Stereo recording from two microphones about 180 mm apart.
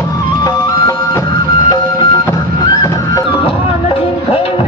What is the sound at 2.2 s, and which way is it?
Music, 20° left (ahead or behind).